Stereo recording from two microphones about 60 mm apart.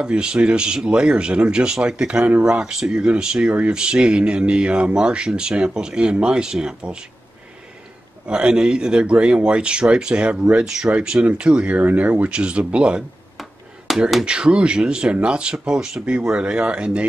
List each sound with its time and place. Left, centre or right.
0.0 s speech: centre
8.3 s speech: centre
13.4 s finger snapping: centre
14.2 s speech: centre